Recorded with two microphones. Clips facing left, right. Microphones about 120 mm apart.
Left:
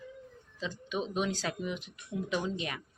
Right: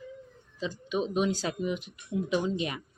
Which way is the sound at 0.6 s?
10° right (ahead or behind).